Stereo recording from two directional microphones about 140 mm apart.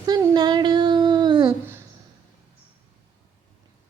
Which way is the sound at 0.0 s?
30° right (ahead or behind).